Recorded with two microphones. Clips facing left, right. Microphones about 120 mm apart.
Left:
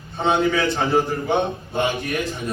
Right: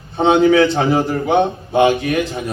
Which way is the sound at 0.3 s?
90° right.